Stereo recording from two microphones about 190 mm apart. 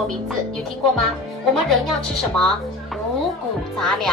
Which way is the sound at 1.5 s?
Centre (ahead or behind).